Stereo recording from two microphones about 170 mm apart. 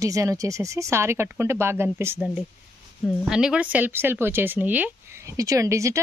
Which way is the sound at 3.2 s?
5° right (ahead or behind).